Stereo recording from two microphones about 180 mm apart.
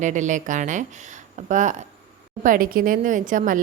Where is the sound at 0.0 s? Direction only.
45° right (ahead or behind).